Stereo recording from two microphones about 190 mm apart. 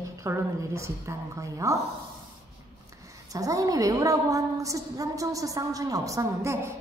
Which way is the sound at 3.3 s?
20° right (ahead or behind).